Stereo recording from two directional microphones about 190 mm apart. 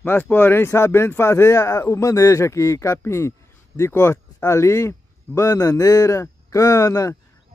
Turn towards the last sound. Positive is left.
turn(degrees=15)  # may be behind; listen again after turning